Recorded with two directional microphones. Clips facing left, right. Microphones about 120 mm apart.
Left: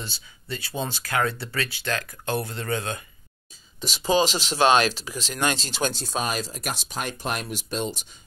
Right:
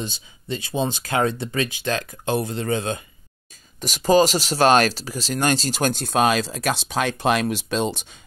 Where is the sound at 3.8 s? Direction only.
45° right (ahead or behind); by 8.1 s 75° right (ahead or behind).